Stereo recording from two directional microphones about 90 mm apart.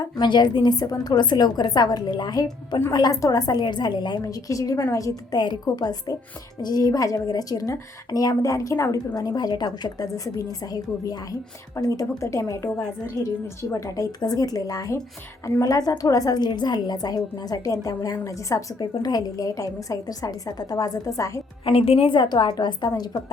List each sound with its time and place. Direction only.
0.0 s a woman's voice: 55° left (ahead or behind)
4.2 s a woman's voice: 40° left (ahead or behind)
9.1 s a woman's voice: 45° left (ahead or behind)
21.6 s a woman's voice: 90° left; by 22.9 s 50° left (ahead or behind)